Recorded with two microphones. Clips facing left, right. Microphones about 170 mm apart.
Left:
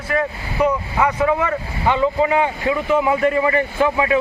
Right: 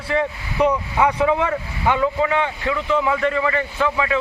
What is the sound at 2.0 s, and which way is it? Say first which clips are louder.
Speech: left 3 dB; 10° left (ahead or behind).